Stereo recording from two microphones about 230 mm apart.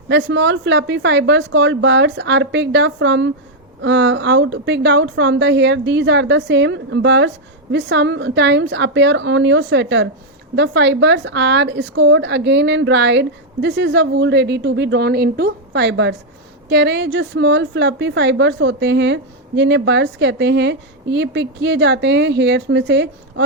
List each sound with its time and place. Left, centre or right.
0.1 s a woman's voice: right